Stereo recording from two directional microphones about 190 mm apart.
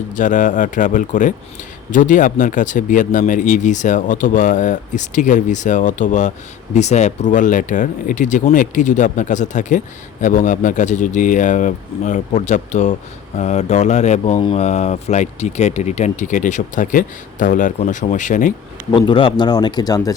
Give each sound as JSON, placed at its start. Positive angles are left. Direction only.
{"t": 0.1, "sound": "speech", "side_deg": 40}
{"t": 18.9, "sound": "a man's voice", "side_deg": 25}